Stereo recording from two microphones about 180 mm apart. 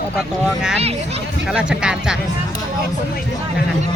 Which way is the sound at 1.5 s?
5° right (ahead or behind).